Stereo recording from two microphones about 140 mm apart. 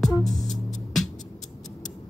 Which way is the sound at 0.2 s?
Centre (ahead or behind).